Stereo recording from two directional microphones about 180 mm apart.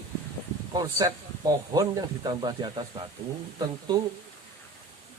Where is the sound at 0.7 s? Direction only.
20° right (ahead or behind).